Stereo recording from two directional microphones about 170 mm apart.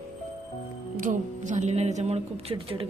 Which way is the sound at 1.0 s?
45° right (ahead or behind).